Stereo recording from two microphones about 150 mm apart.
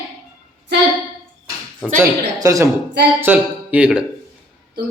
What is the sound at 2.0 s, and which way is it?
A man's voice, 20° right (ahead or behind).